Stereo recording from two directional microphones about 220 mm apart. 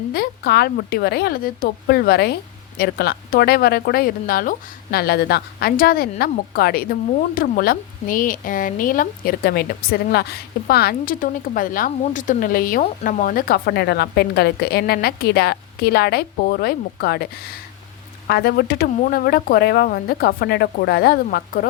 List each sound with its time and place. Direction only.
0.1 s speech: 45° left (ahead or behind)